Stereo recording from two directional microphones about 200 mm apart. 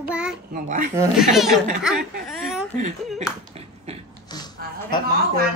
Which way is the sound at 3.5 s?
30° right (ahead or behind).